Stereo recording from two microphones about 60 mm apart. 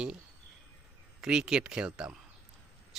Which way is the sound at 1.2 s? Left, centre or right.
Centre.